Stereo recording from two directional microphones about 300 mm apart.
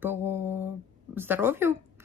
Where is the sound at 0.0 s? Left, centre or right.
Centre.